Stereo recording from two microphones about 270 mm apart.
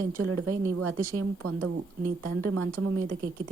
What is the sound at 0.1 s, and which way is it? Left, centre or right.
Speech, right.